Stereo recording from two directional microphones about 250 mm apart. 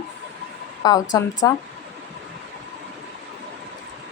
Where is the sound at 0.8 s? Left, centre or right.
Centre.